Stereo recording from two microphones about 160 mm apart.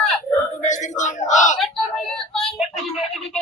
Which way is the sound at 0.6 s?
50° left (ahead or behind).